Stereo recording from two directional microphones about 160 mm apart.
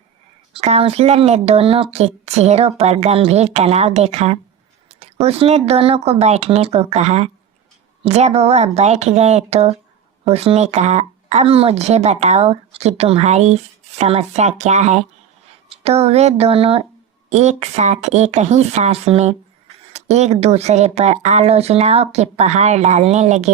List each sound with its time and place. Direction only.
0.5 s speech: 40° right (ahead or behind)